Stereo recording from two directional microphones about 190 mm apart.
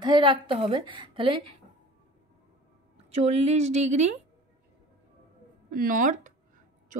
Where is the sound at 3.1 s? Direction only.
35° right (ahead or behind).